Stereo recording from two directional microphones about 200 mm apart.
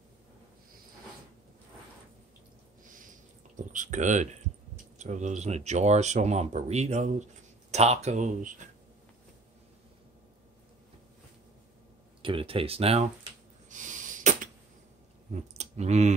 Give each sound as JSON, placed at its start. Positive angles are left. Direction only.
{"t": 3.5, "sound": "speech", "side_deg": -40}
{"t": 12.2, "sound": "speech", "side_deg": -25}
{"t": 13.7, "sound": "sneeze", "side_deg": -40}
{"t": 15.5, "sound": "speech", "side_deg": -35}